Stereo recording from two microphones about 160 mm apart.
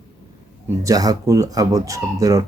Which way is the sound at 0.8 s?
20° right (ahead or behind).